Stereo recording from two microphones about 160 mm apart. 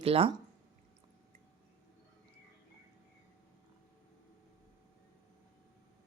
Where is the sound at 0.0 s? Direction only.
35° right (ahead or behind).